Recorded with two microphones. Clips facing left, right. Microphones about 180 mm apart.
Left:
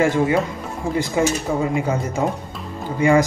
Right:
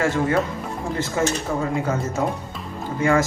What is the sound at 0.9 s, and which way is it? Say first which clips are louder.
Speech: left 3 dB; 15° left (ahead or behind).